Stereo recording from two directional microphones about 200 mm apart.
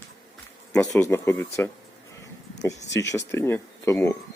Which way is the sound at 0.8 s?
15° left (ahead or behind).